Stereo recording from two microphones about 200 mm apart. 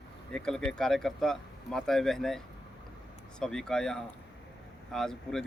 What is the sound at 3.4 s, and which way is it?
Speech, 5° left (ahead or behind).